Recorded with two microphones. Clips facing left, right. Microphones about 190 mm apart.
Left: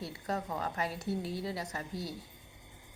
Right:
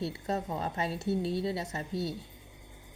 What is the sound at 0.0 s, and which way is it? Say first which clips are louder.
A woman's voice: right 4 dB; 25° right (ahead or behind).